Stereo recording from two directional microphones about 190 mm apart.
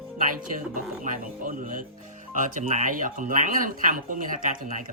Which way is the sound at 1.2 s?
45° right (ahead or behind).